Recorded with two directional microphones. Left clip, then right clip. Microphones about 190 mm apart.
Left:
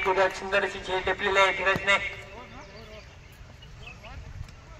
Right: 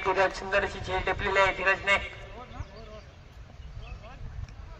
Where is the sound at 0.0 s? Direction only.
40° left (ahead or behind).